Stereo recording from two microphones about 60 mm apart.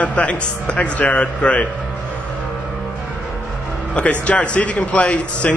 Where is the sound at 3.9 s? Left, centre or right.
Left.